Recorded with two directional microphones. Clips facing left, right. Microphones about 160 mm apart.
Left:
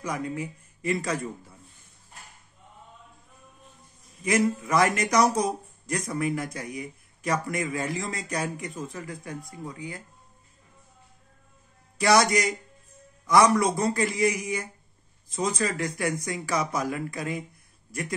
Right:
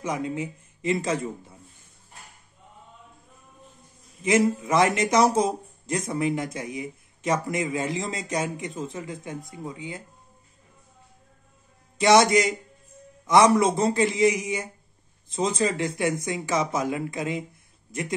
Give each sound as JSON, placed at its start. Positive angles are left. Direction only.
{"t": 0.0, "sound": "a man's voice", "side_deg": -25}
{"t": 4.2, "sound": "speech", "side_deg": -25}
{"t": 12.0, "sound": "speech", "side_deg": -25}